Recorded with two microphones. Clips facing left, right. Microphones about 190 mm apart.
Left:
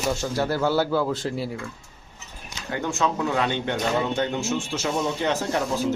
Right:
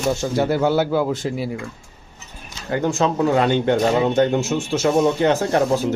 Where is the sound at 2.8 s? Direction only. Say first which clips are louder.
Right 6 dB; 40° right (ahead or behind).